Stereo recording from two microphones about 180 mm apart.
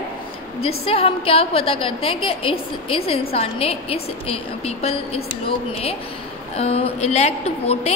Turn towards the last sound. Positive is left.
turn(degrees=35)  # may be behind; listen again after turning